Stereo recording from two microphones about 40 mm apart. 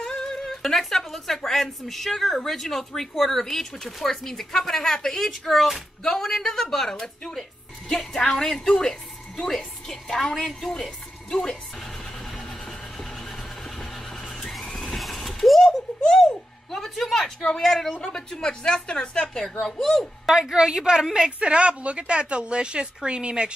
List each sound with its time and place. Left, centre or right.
0.1 s speech: centre
10.1 s speech: centre
14.6 s vehicle: centre
14.9 s vehicle: centre
15.6 s bird: centre
17.6 s a woman's voice: centre
18.0 s speech: centre
19.6 s speech: centre
20.2 s a woman's voice: centre